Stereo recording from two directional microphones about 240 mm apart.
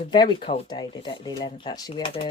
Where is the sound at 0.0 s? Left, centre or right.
Centre.